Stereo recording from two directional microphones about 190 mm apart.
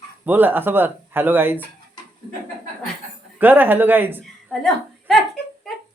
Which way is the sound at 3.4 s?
10° right (ahead or behind).